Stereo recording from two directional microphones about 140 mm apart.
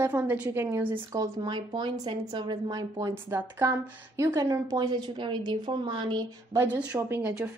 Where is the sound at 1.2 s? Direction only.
30° right (ahead or behind).